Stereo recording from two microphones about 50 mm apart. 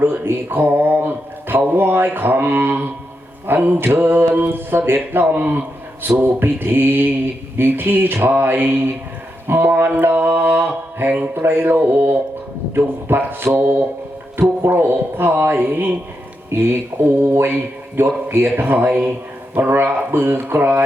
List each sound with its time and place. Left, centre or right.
0.0 s speech: right
1.7 s mantra: right